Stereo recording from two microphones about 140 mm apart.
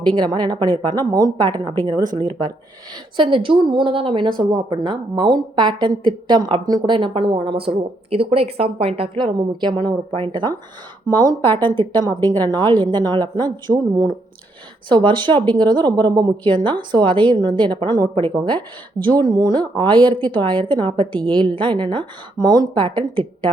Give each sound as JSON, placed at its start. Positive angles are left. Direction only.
{"t": 0.1, "sound": "a woman's voice", "side_deg": -30}